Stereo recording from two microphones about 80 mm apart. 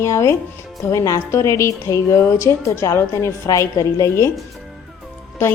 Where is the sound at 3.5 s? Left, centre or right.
Left.